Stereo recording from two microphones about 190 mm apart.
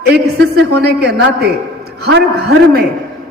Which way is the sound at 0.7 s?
55° right (ahead or behind).